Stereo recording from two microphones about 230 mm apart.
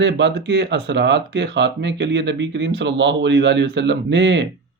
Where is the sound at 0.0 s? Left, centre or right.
Right.